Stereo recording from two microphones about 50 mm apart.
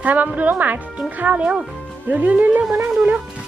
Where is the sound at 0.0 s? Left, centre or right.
Right.